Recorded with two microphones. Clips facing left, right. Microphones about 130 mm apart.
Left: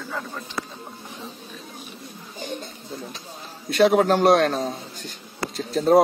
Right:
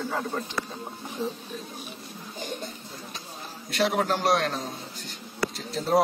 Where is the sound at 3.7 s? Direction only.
60° left (ahead or behind).